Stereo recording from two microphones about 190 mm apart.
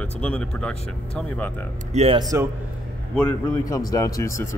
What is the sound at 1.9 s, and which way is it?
Speech, 30° right (ahead or behind).